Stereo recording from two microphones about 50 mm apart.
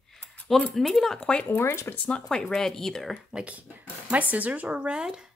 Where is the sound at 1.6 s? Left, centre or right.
Left.